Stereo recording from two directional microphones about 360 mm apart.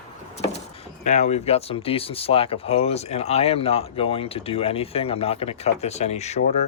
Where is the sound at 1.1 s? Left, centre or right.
Centre.